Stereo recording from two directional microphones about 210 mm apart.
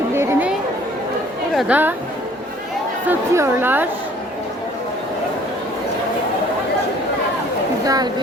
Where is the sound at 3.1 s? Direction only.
10° right (ahead or behind).